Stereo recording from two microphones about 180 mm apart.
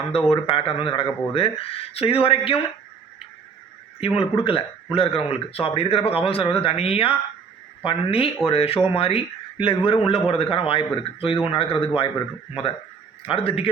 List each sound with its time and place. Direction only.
0.1 s speech: 30° left (ahead or behind)
4.2 s speech: 30° left (ahead or behind)
13.2 s speech: 30° left (ahead or behind)